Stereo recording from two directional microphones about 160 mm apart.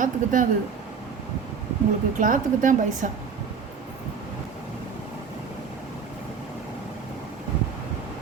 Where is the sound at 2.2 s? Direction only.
55° right (ahead or behind).